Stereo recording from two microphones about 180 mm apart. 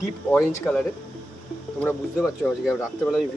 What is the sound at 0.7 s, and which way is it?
Speech, centre (ahead or behind).